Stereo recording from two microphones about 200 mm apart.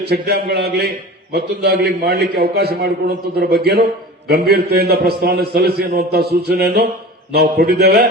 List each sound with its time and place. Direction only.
0.1 s a man's voice: 55° right (ahead or behind)